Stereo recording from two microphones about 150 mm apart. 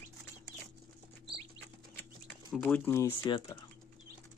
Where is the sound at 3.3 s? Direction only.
30° left (ahead or behind).